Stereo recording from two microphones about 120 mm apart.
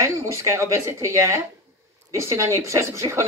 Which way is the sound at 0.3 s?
25° right (ahead or behind).